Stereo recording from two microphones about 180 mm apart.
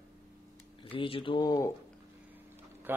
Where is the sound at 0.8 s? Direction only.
30° left (ahead or behind).